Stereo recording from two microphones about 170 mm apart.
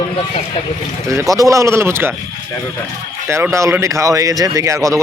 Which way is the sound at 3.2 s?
15° right (ahead or behind).